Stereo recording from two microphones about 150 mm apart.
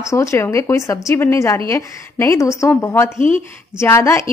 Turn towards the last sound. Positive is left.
turn(degrees=20)  # may be behind; listen again after turning